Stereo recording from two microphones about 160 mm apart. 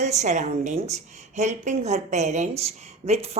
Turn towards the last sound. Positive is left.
turn(degrees=-45)  # may be behind; listen again after turning